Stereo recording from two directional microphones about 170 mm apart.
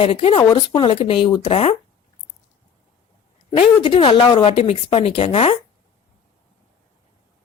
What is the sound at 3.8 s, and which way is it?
Speech, 30° left (ahead or behind).